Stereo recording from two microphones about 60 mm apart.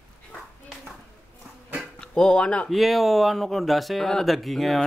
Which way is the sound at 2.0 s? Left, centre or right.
Centre.